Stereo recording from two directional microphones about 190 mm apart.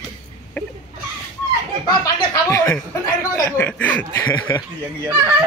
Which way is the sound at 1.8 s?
20° left (ahead or behind).